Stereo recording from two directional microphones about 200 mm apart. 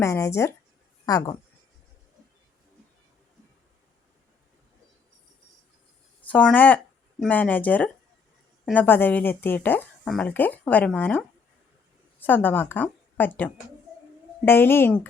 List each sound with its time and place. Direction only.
0.0 s speech: 15° left (ahead or behind)
6.2 s a woman's voice: 5° left (ahead or behind)